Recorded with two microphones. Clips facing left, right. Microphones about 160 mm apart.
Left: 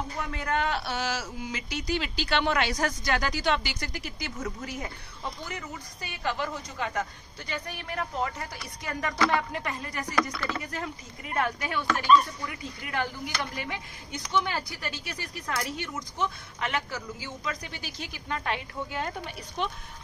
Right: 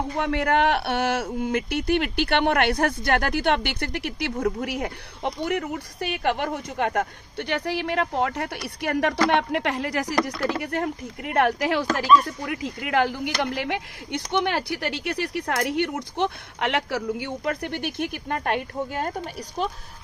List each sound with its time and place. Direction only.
0.1 s speech: 70° right (ahead or behind)
10.5 s speech: 65° right (ahead or behind); by 19.7 s 40° right (ahead or behind)